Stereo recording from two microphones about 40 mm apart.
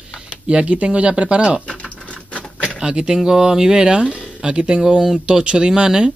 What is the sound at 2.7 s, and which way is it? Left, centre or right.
Speech, centre.